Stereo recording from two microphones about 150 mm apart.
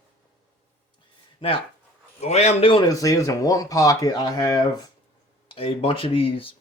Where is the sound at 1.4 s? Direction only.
35° left (ahead or behind).